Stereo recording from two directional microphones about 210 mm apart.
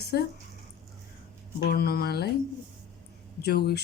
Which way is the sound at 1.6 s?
50° left (ahead or behind).